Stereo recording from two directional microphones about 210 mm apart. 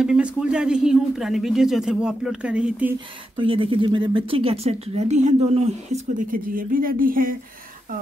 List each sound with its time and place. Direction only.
0.0 s speech: 5° right (ahead or behind)
3.3 s speech: 25° right (ahead or behind); by 7.3 s 40° right (ahead or behind)